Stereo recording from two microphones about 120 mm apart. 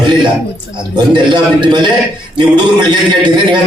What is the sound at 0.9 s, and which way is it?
A man's voice, 40° right (ahead or behind).